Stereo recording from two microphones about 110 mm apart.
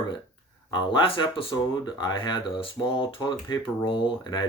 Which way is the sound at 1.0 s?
55° left (ahead or behind).